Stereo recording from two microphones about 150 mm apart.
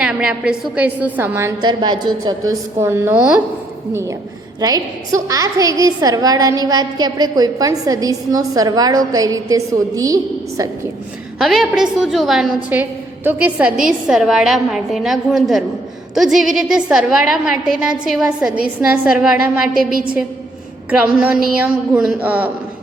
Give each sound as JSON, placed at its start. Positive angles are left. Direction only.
{"t": 0.0, "sound": "a woman's voice", "side_deg": -5}
{"t": 1.6, "sound": "a woman's voice", "side_deg": -30}
{"t": 4.6, "sound": "a woman's voice", "side_deg": -25}
{"t": 11.3, "sound": "a woman's voice", "side_deg": 0}
{"t": 19.7, "sound": "a woman's voice", "side_deg": -70}
{"t": 20.9, "sound": "a woman's voice", "side_deg": -10}